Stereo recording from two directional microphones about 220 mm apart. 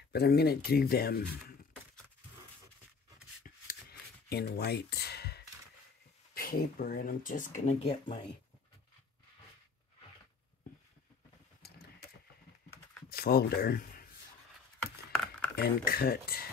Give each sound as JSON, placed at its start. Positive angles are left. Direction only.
{"t": 0.1, "sound": "speech", "side_deg": 45}
{"t": 3.4, "sound": "a sound", "side_deg": 40}
{"t": 4.3, "sound": "speech", "side_deg": 45}
{"t": 13.1, "sound": "speech", "side_deg": 45}
{"t": 14.8, "sound": "a sound", "side_deg": 5}
{"t": 15.5, "sound": "speech", "side_deg": 45}